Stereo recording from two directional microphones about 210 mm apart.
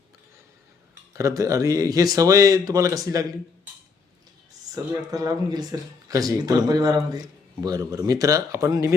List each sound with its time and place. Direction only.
1.1 s speech: 15° right (ahead or behind)
4.7 s speech: 20° right (ahead or behind)